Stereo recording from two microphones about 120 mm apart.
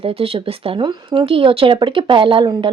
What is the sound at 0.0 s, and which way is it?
Speech, 55° right (ahead or behind).